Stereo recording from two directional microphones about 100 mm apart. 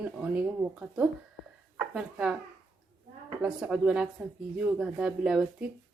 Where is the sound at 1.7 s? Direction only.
10° right (ahead or behind).